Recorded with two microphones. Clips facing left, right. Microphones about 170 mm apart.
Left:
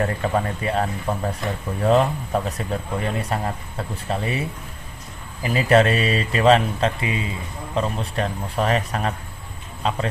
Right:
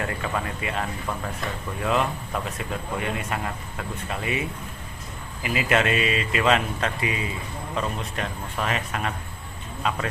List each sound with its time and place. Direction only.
0.0 s speech: 40° left (ahead or behind)